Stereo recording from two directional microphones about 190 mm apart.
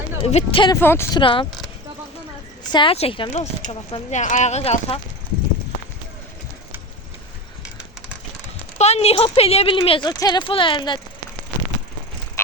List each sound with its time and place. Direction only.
0.2 s speech: 30° left (ahead or behind)
0.8 s speech: 10° left (ahead or behind)
1.2 s speech: 25° left (ahead or behind)
2.7 s speech: 30° left (ahead or behind)
8.8 s speech: 35° left (ahead or behind)